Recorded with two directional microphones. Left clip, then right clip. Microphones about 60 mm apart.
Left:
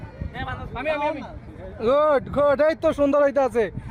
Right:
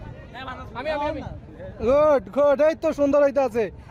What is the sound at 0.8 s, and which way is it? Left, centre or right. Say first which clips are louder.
Speech: left 2 dB; right.